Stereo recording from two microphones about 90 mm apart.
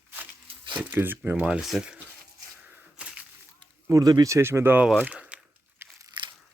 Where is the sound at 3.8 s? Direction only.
40° right (ahead or behind).